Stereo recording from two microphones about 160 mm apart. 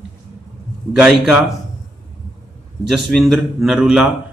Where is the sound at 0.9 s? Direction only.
5° right (ahead or behind).